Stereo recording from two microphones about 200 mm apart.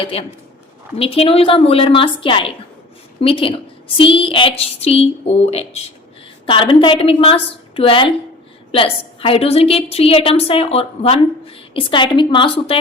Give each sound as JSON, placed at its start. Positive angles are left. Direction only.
{"t": 0.0, "sound": "a woman's voice", "side_deg": 30}